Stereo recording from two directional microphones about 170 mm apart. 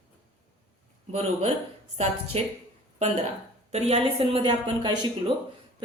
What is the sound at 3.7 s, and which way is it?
A woman's voice, 40° right (ahead or behind).